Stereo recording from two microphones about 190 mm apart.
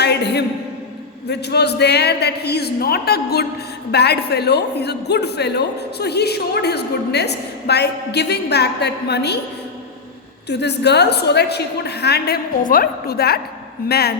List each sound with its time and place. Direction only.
0.0 s a sound: 60° left (ahead or behind)
1.3 s speech: 60° left (ahead or behind)
10.5 s speech: 60° left (ahead or behind)